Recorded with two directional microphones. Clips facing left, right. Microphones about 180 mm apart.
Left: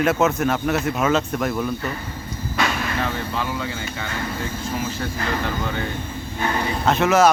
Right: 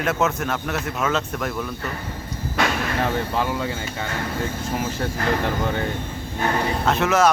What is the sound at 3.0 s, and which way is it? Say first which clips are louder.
Speech: right 3 dB; 45° right (ahead or behind).